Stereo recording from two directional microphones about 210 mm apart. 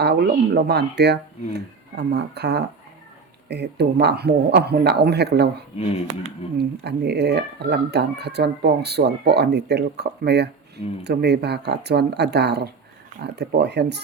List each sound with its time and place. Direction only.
0.0 s speech: 50° right (ahead or behind)